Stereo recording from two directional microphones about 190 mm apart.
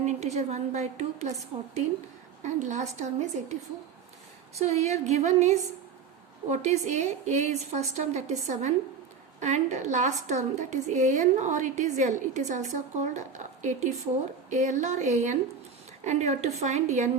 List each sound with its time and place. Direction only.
0.0 s a woman's voice: 35° right (ahead or behind)
2.4 s a woman's voice: 40° right (ahead or behind)